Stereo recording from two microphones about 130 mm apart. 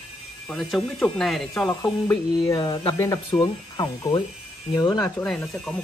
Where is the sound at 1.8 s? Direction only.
25° left (ahead or behind).